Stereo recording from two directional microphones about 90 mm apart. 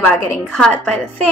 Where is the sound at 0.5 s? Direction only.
10° left (ahead or behind).